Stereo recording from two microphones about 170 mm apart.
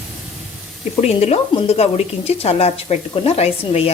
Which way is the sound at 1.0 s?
40° left (ahead or behind).